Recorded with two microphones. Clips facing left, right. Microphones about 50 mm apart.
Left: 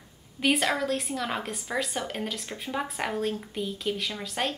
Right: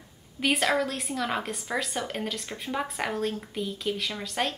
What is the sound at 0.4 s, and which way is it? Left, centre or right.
A woman's voice, centre.